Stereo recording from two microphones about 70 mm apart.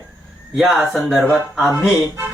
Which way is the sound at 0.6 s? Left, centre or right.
Centre.